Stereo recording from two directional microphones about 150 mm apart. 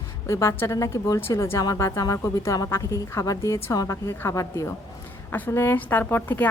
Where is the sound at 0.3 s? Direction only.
15° left (ahead or behind).